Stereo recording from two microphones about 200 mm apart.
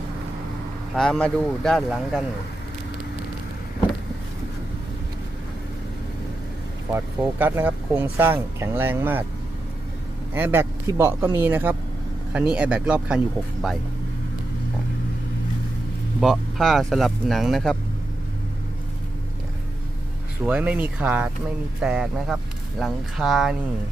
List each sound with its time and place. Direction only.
0.9 s speech: 5° left (ahead or behind)
6.9 s speech: 10° right (ahead or behind)
10.3 s speech: 10° right (ahead or behind)
16.2 s speech: centre (ahead or behind)
20.4 s speech: 5° right (ahead or behind)